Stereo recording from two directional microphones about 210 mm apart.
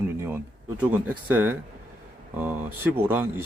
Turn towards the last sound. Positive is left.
turn(degrees=-10)  # may be behind; listen again after turning